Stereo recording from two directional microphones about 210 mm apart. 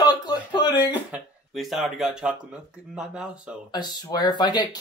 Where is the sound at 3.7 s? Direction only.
20° left (ahead or behind).